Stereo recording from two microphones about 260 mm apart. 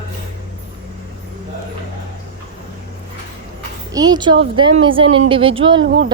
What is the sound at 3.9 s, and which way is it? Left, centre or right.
A woman's voice, centre.